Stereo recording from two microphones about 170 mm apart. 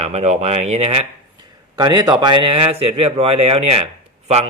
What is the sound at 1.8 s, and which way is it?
A man's voice, 20° right (ahead or behind).